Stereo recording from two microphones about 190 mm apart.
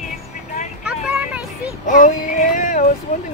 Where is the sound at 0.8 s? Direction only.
5° right (ahead or behind).